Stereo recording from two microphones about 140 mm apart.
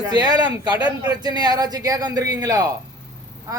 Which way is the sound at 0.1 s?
30° right (ahead or behind).